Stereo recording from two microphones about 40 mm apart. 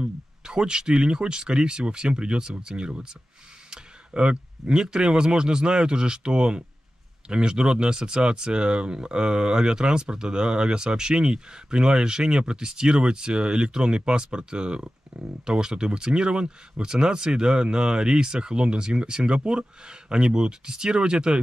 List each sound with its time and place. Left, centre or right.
0.0 s speech: right